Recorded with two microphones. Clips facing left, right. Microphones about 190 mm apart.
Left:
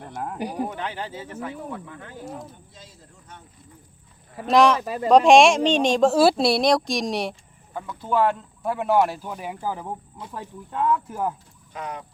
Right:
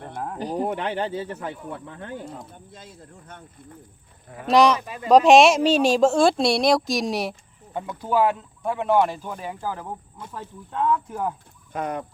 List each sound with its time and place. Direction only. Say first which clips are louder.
0.3 s speech: right 4 dB; 10° left (ahead or behind)
0.6 s speech: right 6 dB; 60° right (ahead or behind)
2.0 s speech: right 2 dB; 55° right (ahead or behind)
4.4 s speech: even; centre (ahead or behind)
4.8 s speech: left 7 dB; 40° left (ahead or behind)
5.0 s speech: even; centre (ahead or behind)
7.7 s speech: right 3 dB; 25° right (ahead or behind)
8.0 s speech: even; 5° right (ahead or behind)
11.7 s speech: right 6 dB; 50° right (ahead or behind)